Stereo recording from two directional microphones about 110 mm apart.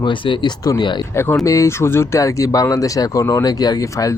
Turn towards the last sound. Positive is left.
turn(degrees=30)  # may be behind; listen again after turning